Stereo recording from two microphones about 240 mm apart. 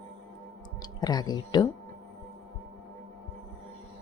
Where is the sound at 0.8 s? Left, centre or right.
Centre.